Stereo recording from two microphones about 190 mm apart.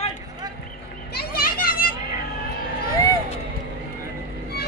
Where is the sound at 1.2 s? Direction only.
50° left (ahead or behind).